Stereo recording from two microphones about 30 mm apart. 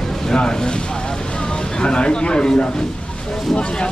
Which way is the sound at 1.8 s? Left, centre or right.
Left.